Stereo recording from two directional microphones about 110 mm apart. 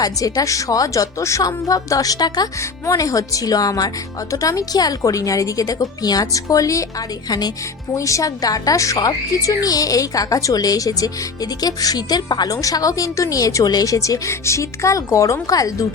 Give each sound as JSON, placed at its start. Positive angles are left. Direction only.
{"t": 0.0, "sound": "a woman's voice", "side_deg": 35}